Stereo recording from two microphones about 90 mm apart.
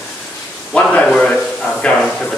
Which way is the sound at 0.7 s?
10° left (ahead or behind).